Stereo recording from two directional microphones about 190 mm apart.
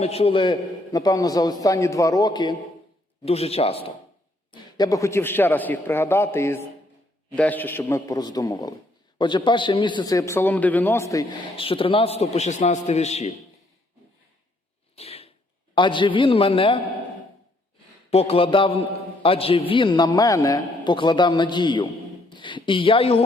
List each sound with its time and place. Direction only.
0.0 s a man's voice: 30° left (ahead or behind)
3.2 s speech: 30° left (ahead or behind)
4.5 s a man's voice: 20° left (ahead or behind); by 13.3 s 35° left (ahead or behind)
14.9 s a sound: 30° left (ahead or behind)
15.7 s a man's voice: 25° left (ahead or behind)
18.1 s a man's voice: 30° left (ahead or behind)